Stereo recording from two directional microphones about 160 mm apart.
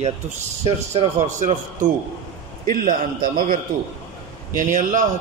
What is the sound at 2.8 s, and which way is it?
A man's voice, 60° right (ahead or behind).